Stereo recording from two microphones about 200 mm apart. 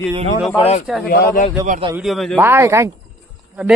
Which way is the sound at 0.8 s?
Centre (ahead or behind).